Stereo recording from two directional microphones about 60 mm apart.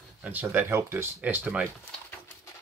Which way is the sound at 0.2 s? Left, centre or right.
Right.